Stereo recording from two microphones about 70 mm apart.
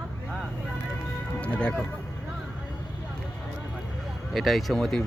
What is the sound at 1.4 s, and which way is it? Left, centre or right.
Speech, centre.